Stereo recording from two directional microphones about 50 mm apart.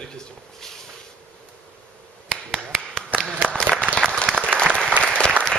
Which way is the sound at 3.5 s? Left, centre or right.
Right.